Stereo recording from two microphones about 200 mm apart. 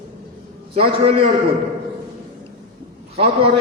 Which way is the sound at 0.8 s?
30° right (ahead or behind).